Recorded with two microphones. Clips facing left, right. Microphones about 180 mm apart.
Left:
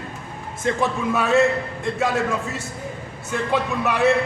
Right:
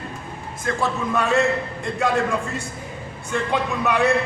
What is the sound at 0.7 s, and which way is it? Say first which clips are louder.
Speech: left 3 dB; 25° left (ahead or behind).